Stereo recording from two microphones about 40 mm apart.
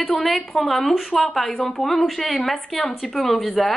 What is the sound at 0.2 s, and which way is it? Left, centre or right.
A woman's voice, centre.